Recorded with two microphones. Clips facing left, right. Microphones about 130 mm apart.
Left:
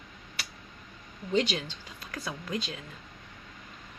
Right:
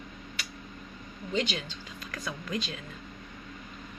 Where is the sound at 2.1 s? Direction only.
30° left (ahead or behind).